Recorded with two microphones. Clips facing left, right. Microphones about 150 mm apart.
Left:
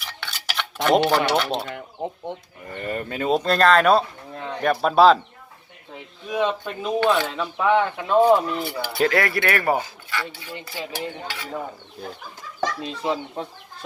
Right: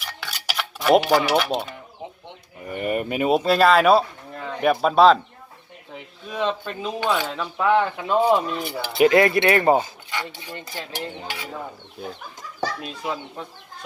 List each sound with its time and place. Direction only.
0.2 s cutlery: 5° right (ahead or behind)
0.9 s speech: 5° right (ahead or behind)
2.6 s speech: 15° right (ahead or behind); by 5.2 s centre (ahead or behind)
6.2 s speech: 5° left (ahead or behind)
7.0 s speech: 10° right (ahead or behind)
7.3 s speech: centre (ahead or behind)
8.2 s speech: 10° right (ahead or behind)
10.8 s speech: 10° left (ahead or behind)
11.1 s speech: 20° right (ahead or behind)
12.8 s speech: 25° left (ahead or behind)